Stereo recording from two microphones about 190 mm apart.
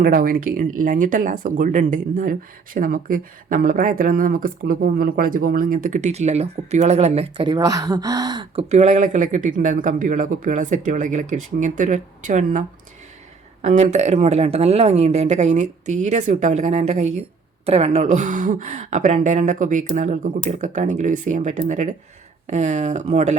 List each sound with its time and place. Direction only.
0.0 s speech: 50° right (ahead or behind)